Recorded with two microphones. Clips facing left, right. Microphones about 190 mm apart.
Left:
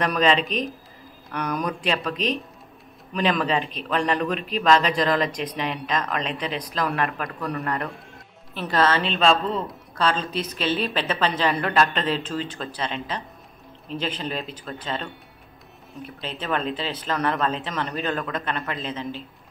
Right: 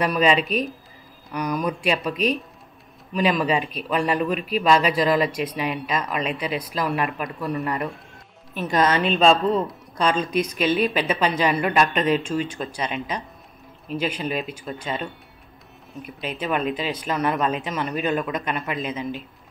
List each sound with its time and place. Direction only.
0.0 s speech: 10° right (ahead or behind)
8.5 s speech: 15° right (ahead or behind)